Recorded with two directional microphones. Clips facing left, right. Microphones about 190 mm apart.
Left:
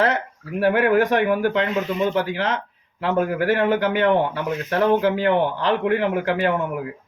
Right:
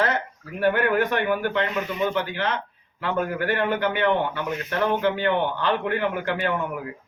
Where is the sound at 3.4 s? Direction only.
90° left.